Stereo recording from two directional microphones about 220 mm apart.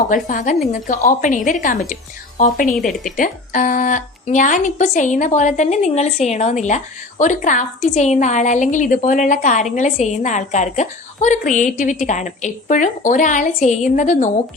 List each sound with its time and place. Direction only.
0.1 s speech: 35° left (ahead or behind)